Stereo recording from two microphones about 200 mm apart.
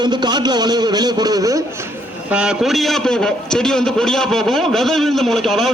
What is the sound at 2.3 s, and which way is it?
A man's voice, 5° right (ahead or behind).